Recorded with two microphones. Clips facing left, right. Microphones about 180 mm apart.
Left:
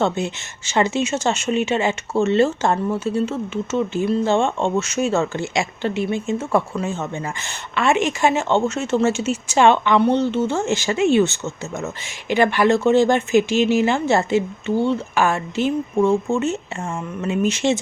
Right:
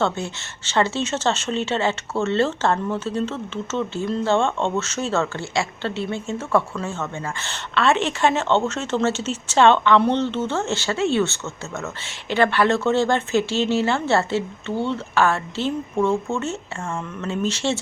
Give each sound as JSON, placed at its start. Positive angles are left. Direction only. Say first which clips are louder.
{"t": 0.0, "sound": "speech", "louder": "left 3 dB", "side_deg": 15}